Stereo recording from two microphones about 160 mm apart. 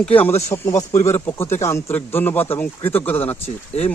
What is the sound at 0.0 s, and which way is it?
A man's voice, 10° left (ahead or behind).